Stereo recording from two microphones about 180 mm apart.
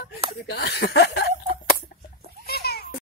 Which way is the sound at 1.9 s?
50° left (ahead or behind).